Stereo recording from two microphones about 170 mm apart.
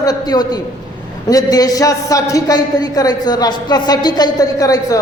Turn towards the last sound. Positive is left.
turn(degrees=20)  # may be behind; listen again after turning